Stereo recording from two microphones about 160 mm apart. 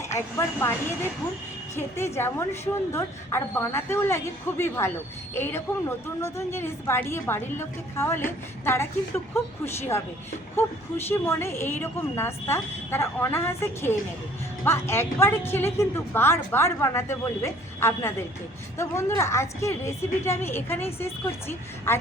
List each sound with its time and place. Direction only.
0.0 s a woman's voice: 15° left (ahead or behind)